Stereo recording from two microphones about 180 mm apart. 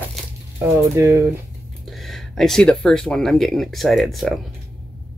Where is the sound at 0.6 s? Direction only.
15° right (ahead or behind).